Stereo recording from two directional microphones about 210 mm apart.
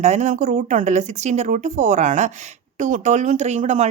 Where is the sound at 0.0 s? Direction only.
35° right (ahead or behind).